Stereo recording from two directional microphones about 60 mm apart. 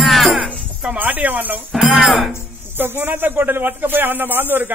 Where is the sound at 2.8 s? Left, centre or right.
Right.